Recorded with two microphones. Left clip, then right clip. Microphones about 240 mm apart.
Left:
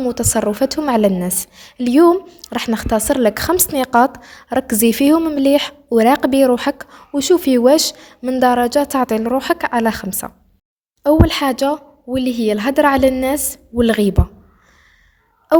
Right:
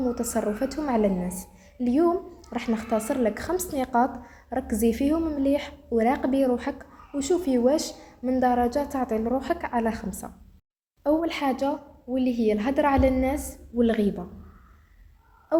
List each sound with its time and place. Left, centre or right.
0.0 s a woman's voice: left